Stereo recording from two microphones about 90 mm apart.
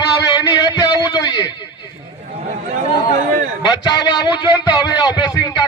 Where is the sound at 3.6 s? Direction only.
50° left (ahead or behind).